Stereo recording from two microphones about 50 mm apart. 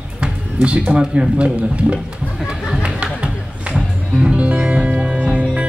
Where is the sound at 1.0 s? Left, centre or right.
Centre.